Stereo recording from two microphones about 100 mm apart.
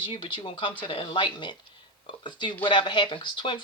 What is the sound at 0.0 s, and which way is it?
Speech, 55° left (ahead or behind).